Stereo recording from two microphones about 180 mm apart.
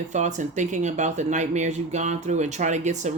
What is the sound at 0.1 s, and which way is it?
Speech, 40° right (ahead or behind).